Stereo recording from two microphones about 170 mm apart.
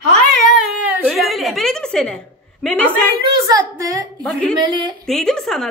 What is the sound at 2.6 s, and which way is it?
Speech, 5° left (ahead or behind).